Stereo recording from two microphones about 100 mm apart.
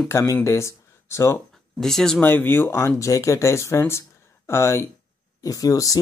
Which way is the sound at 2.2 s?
20° left (ahead or behind).